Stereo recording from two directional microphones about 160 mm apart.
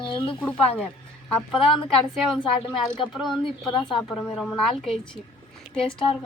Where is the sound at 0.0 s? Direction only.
30° left (ahead or behind).